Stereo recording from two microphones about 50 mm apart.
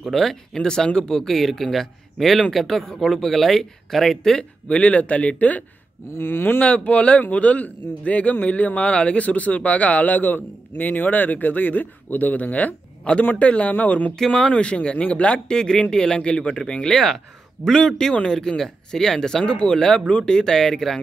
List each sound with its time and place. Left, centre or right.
0.1 s speech: centre; by 5.6 s left
6.1 s speech: left
6.6 s a man's voice: left; by 21.0 s centre